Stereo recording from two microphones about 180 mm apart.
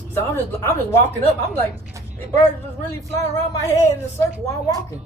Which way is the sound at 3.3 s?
15° left (ahead or behind).